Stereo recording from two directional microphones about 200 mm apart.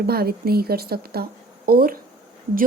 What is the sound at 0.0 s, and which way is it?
Speech, 50° right (ahead or behind).